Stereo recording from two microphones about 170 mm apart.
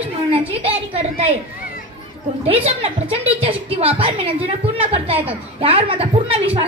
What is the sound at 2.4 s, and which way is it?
A woman's voice, 35° right (ahead or behind).